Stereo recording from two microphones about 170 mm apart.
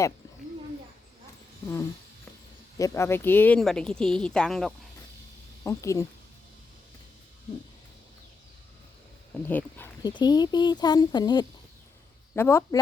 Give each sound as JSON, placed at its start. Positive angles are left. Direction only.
{"t": 2.7, "sound": "speech", "side_deg": 15}
{"t": 5.6, "sound": "speech", "side_deg": 20}
{"t": 9.3, "sound": "speech", "side_deg": 10}
{"t": 10.0, "sound": "speech", "side_deg": 25}
{"t": 12.3, "sound": "speech", "side_deg": 15}